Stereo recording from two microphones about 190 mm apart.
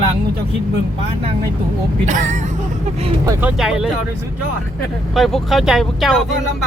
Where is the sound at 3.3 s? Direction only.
10° right (ahead or behind).